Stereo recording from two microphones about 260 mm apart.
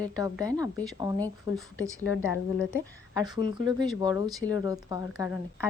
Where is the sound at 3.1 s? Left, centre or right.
Centre.